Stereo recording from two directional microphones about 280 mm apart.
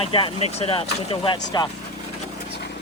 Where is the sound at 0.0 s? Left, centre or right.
Centre.